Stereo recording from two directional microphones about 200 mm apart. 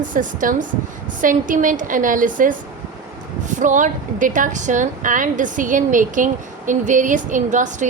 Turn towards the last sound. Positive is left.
turn(degrees=-40)  # may be behind; listen again after turning